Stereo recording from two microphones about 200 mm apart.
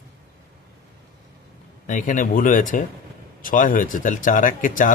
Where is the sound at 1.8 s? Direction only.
40° left (ahead or behind).